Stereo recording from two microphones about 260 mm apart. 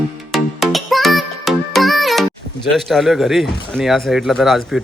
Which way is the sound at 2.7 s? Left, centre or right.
Centre.